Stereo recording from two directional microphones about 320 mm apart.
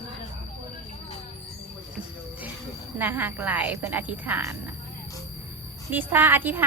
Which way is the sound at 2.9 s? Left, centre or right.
Centre.